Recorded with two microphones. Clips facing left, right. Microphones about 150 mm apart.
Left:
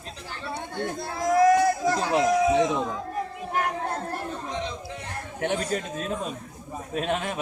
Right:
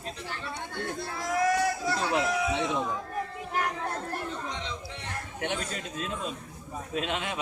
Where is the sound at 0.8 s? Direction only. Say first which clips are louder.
Left 5 dB; 40° left (ahead or behind).